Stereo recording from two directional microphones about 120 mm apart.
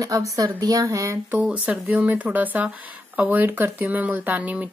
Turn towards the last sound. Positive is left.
turn(degrees=-15)  # may be behind; listen again after turning